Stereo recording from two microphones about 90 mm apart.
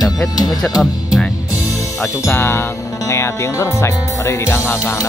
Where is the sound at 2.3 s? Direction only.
25° left (ahead or behind).